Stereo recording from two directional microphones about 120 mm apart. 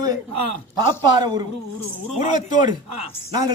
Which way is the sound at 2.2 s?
75° left (ahead or behind).